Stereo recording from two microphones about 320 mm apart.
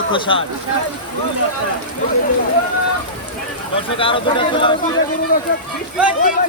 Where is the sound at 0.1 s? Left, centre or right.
Centre.